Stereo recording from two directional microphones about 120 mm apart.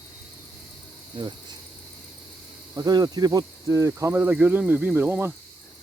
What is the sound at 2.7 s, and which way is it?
Speech, 35° right (ahead or behind).